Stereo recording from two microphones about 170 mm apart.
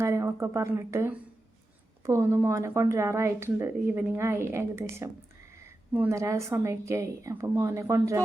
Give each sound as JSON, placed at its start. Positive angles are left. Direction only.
{"t": 0.0, "sound": "speech", "side_deg": -15}